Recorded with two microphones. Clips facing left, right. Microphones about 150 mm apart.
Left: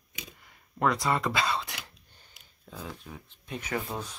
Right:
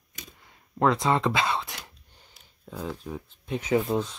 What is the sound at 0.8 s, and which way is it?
Speech, 20° right (ahead or behind).